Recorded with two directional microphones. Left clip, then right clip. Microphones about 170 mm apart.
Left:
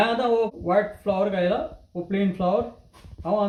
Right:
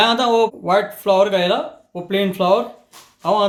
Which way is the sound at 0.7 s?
60° right (ahead or behind).